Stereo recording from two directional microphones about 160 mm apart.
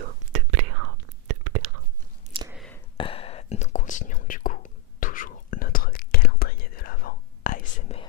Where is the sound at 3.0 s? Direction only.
35° left (ahead or behind); by 7.6 s 65° left (ahead or behind).